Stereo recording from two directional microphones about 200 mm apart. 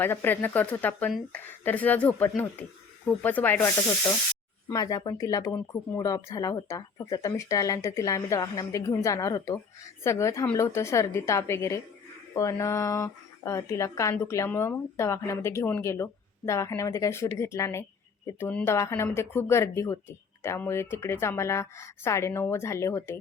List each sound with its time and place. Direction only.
0.0 s speech: 10° left (ahead or behind)
4.7 s speech: 20° left (ahead or behind)